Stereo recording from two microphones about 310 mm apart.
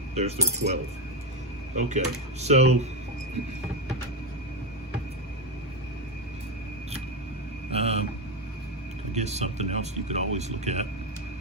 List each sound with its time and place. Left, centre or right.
0.1 s speech: right
1.8 s speech: right
7.7 s a sound: centre
9.1 s speech: right